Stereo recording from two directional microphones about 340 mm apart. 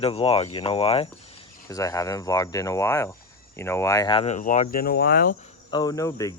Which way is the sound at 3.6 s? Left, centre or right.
Centre.